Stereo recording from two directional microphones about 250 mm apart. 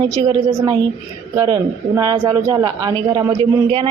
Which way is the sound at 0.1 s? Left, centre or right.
Centre.